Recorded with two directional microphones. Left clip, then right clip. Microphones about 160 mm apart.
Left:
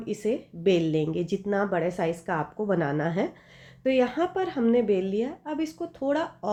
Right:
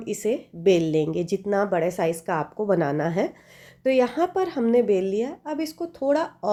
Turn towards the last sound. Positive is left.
turn(degrees=-35)  # may be behind; listen again after turning